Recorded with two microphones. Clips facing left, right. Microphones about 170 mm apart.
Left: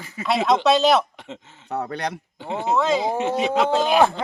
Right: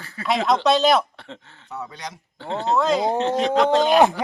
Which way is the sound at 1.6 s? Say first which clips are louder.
Left 7 dB; 65° left (ahead or behind).